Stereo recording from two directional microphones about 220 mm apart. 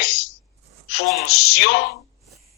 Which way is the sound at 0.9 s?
50° left (ahead or behind).